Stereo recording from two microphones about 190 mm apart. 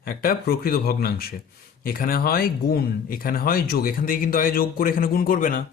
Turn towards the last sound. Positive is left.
turn(degrees=45)  # may be behind; listen again after turning